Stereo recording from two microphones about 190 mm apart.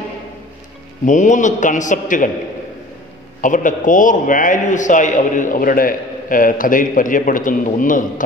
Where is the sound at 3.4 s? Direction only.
45° left (ahead or behind).